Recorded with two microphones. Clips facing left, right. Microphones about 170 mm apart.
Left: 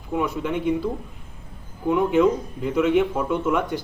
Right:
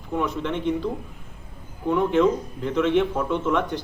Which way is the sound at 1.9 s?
5° left (ahead or behind).